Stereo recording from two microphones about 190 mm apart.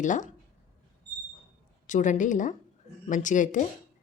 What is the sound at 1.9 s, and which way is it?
A woman's voice, 40° left (ahead or behind).